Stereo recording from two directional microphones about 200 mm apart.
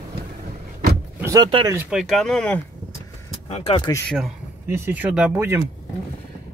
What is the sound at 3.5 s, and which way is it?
Speech, 30° left (ahead or behind).